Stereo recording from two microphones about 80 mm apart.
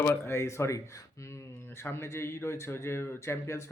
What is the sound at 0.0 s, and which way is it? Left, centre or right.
Speech, left.